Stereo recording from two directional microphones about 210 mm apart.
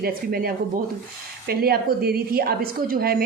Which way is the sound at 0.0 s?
45° right (ahead or behind).